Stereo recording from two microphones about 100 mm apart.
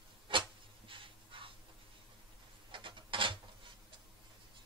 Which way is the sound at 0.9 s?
60° right (ahead or behind).